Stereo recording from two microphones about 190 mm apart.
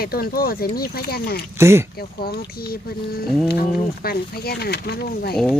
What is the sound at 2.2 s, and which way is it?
Speech, 55° left (ahead or behind).